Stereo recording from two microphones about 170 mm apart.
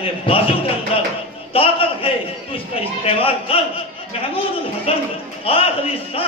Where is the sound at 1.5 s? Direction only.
35° left (ahead or behind).